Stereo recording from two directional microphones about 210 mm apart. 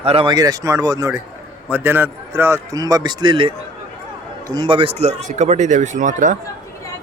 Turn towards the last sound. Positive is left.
turn(degrees=-35)  # may be behind; listen again after turning